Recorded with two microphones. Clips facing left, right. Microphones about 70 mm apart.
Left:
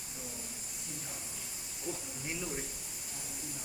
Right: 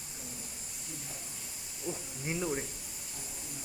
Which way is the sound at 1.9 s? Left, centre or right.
Centre.